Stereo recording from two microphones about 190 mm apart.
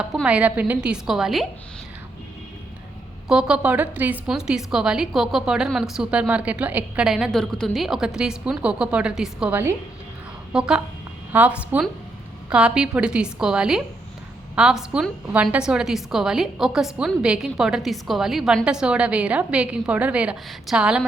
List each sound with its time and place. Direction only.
0.0 s a woman's voice: 5° right (ahead or behind)
3.2 s a woman's voice: 5° right (ahead or behind)